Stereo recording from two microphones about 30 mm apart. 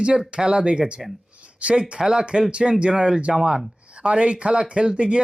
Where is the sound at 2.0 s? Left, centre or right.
Right.